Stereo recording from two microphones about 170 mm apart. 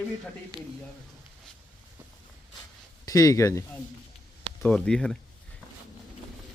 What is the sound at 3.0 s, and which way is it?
Speech, 20° left (ahead or behind).